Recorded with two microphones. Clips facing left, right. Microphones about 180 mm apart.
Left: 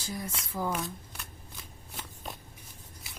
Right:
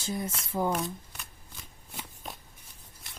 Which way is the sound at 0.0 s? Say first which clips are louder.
Right 4 dB; 25° right (ahead or behind).